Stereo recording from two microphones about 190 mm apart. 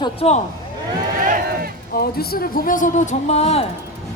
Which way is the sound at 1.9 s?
55° left (ahead or behind).